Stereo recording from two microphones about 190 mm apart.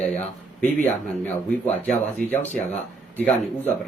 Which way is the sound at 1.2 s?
10° left (ahead or behind).